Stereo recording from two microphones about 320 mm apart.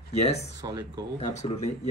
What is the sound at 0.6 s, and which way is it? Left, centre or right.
Speech, centre.